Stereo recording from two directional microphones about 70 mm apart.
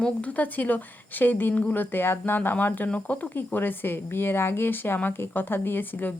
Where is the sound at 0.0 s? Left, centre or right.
Left.